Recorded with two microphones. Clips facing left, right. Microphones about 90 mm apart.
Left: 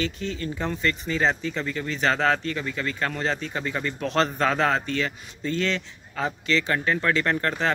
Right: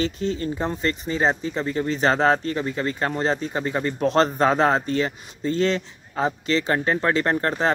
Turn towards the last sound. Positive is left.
turn(degrees=-25)  # may be behind; listen again after turning